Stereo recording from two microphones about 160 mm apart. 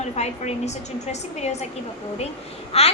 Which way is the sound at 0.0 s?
45° left (ahead or behind).